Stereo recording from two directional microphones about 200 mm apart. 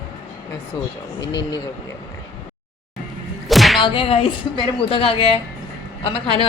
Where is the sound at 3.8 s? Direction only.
25° left (ahead or behind).